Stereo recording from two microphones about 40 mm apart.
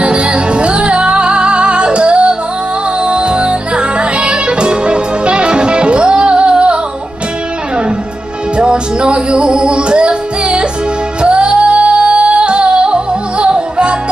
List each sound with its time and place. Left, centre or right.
0.0 s music: right
8.5 s music: right